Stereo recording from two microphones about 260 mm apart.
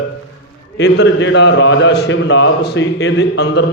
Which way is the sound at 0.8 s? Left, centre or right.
Left.